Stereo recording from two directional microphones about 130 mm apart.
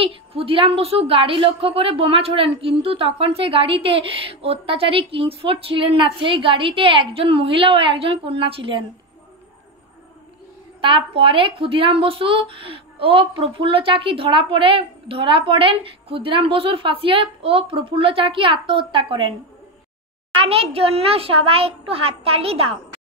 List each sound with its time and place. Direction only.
0.0 s a woman's voice: 45° right (ahead or behind)
10.8 s a woman's voice: 40° right (ahead or behind)
20.3 s a woman's voice: 50° right (ahead or behind)